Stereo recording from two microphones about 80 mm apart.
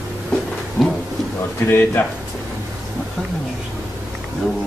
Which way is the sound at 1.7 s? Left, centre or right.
Left.